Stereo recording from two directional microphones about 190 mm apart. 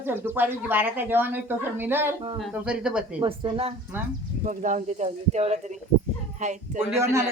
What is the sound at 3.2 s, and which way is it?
Speech, 30° right (ahead or behind).